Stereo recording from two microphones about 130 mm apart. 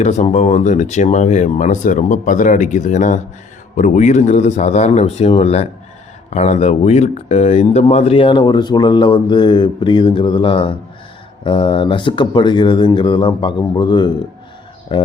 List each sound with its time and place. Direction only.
0.0 s speech: 60° left (ahead or behind); by 15.1 s 40° left (ahead or behind)